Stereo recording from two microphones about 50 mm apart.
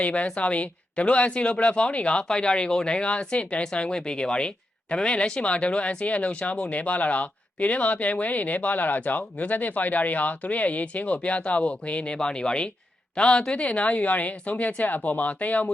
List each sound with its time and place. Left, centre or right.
0.0 s speech: left